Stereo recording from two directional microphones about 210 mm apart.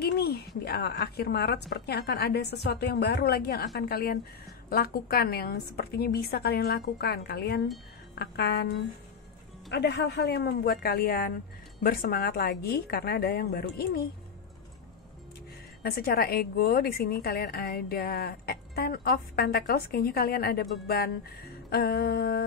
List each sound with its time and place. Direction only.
0.0 s a sound: 50° left (ahead or behind)
0.7 s a woman's voice: 50° left (ahead or behind)
15.8 s a woman's voice: 45° left (ahead or behind)